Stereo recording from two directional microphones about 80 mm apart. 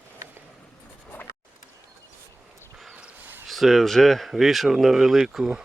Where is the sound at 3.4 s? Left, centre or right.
Centre.